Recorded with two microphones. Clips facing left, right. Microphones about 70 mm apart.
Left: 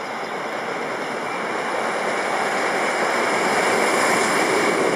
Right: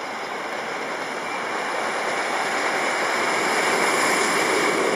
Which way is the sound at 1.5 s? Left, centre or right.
Centre.